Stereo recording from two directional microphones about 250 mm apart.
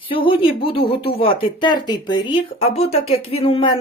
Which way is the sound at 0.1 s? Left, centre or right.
Left.